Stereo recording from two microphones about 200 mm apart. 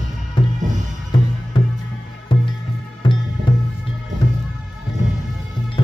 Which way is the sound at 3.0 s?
25° left (ahead or behind).